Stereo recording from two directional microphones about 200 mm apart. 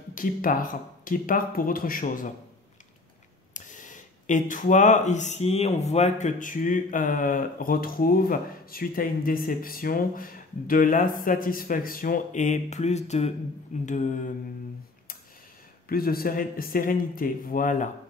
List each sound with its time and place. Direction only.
0.1 s speech: 45° left (ahead or behind)
3.5 s speech: 40° left (ahead or behind)
13.8 s mantra: 40° left (ahead or behind)
15.9 s speech: 50° left (ahead or behind)